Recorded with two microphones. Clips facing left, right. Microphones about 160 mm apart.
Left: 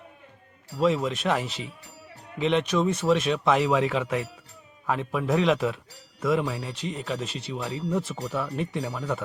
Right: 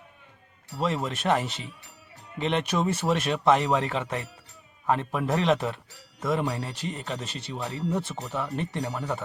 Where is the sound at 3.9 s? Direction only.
35° right (ahead or behind).